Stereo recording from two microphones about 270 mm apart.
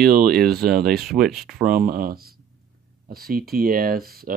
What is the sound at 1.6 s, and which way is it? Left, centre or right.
Speech, right.